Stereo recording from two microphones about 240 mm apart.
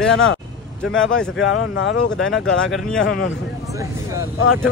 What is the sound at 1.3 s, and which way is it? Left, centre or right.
Speech, left.